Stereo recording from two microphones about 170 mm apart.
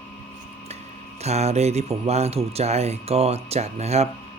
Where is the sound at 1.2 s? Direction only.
40° right (ahead or behind).